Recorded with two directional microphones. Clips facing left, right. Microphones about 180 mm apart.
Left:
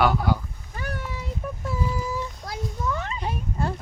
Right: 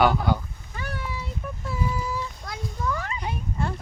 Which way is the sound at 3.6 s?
40° left (ahead or behind).